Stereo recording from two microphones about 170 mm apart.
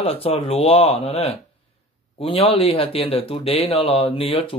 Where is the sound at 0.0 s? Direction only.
35° left (ahead or behind).